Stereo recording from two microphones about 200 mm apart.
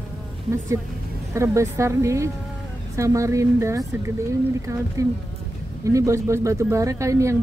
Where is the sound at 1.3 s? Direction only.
15° right (ahead or behind).